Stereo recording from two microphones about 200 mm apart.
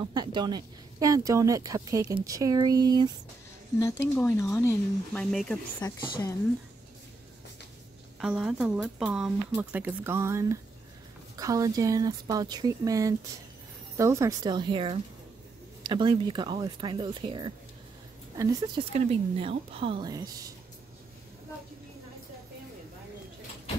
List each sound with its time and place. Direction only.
0.0 s speech: 20° right (ahead or behind)
3.8 s speech: 10° left (ahead or behind)
5.8 s speech: 20° left (ahead or behind)
8.2 s speech: 5° right (ahead or behind)
18.9 s speech: 30° right (ahead or behind)